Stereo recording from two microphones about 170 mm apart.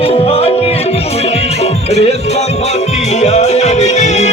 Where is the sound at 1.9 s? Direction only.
40° left (ahead or behind).